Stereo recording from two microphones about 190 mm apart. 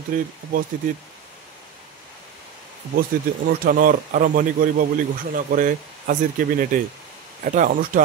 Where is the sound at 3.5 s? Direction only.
45° right (ahead or behind).